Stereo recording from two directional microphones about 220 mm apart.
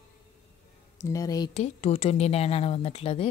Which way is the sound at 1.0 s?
15° left (ahead or behind).